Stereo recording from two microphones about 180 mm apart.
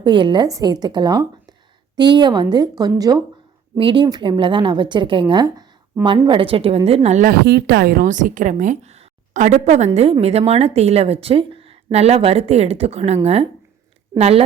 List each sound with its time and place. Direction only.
0.0 s a woman's voice: 25° right (ahead or behind)
7.3 s a woman's voice: 65° right (ahead or behind); by 14.4 s 35° right (ahead or behind)